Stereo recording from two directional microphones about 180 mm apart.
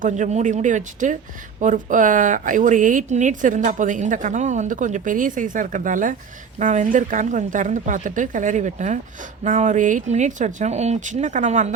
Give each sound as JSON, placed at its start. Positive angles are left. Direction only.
{"t": 0.0, "sound": "speech", "side_deg": -40}